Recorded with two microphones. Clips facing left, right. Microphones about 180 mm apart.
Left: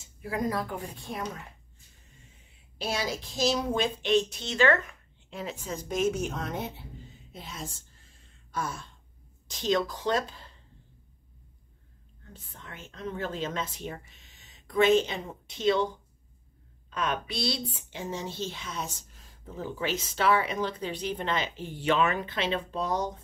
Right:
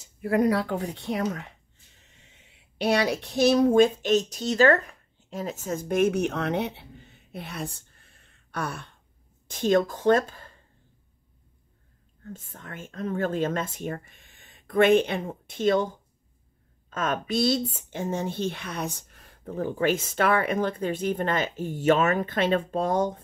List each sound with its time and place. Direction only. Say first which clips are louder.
0.2 s a woman's voice: right 8 dB; 60° right (ahead or behind)
9.5 s a woman's voice: right 5 dB; 50° right (ahead or behind)
12.3 s a woman's voice: right 7 dB; 45° right (ahead or behind)